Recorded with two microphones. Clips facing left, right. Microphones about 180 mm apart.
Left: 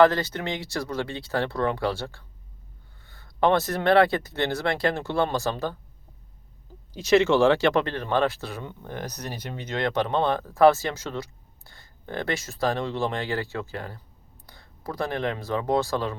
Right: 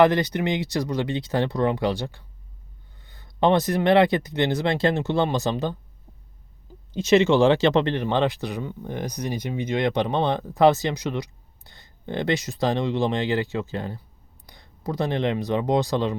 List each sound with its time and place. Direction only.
0.0 s speech: 15° right (ahead or behind)
6.9 s speech: 20° right (ahead or behind)